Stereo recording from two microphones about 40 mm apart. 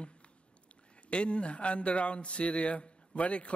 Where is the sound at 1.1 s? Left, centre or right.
Left.